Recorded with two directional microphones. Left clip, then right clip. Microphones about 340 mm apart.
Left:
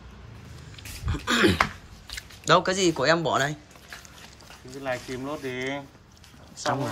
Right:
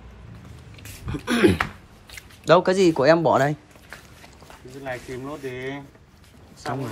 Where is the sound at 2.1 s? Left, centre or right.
Centre.